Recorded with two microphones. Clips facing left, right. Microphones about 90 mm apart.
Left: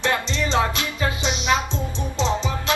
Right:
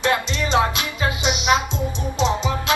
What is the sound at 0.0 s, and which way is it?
Music, 20° right (ahead or behind).